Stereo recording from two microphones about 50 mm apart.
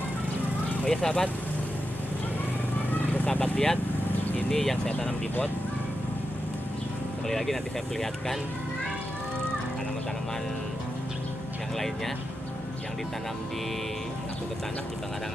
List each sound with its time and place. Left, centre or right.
0.8 s speech: centre
2.9 s vehicle: left
3.5 s speech: centre
7.2 s speech: centre